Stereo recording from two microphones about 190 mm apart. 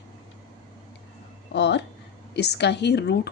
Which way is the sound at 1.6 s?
65° left (ahead or behind).